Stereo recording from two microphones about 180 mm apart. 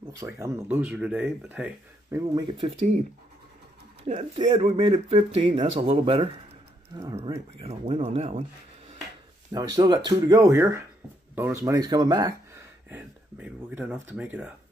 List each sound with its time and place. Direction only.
0.2 s speech: 15° right (ahead or behind)
2.4 s speech: 30° right (ahead or behind)
4.0 s speech: 35° right (ahead or behind)
6.9 s speech: 20° right (ahead or behind)
7.5 s speech: 35° right (ahead or behind)
9.8 s speech: 25° right (ahead or behind); by 14.5 s 10° right (ahead or behind)